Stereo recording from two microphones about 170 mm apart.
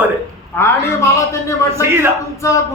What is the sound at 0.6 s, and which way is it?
Speech, 15° left (ahead or behind).